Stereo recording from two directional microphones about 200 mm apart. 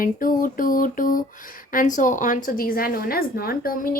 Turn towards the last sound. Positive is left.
turn(degrees=45)  # may be behind; listen again after turning